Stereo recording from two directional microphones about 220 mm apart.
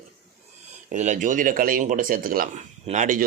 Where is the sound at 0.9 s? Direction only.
35° right (ahead or behind).